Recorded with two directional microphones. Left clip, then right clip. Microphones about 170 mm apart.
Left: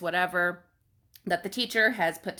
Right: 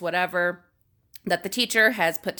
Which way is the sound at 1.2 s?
35° right (ahead or behind).